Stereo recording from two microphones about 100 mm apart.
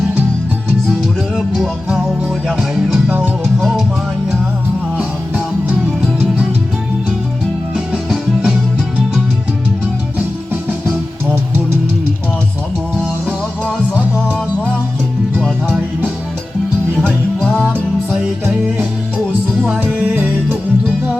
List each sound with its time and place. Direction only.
1.4 s music: centre (ahead or behind)
3.1 s music: 20° right (ahead or behind)
3.4 s music: centre (ahead or behind)
4.9 s music: 10° right (ahead or behind)
8.1 s music: 5° right (ahead or behind)
14.3 s music: 15° right (ahead or behind)
17.1 s music: 10° left (ahead or behind)
18.1 s music: 10° right (ahead or behind)